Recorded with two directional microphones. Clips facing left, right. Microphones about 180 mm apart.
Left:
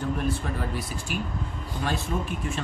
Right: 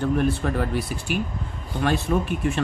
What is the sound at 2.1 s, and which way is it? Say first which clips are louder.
Speech: right 8 dB; 60° right (ahead or behind).